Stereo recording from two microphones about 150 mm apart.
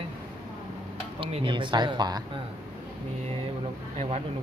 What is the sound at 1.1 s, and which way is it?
Speech, 35° right (ahead or behind).